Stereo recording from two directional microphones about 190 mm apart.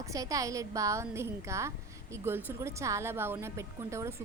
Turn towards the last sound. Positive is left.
turn(degrees=-15)  # may be behind; listen again after turning